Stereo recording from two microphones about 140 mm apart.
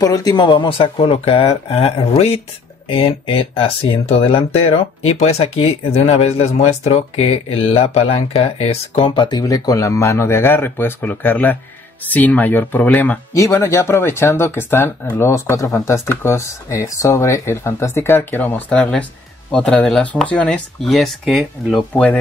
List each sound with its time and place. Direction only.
0.0 s speech: 25° left (ahead or behind); by 22.2 s 10° left (ahead or behind)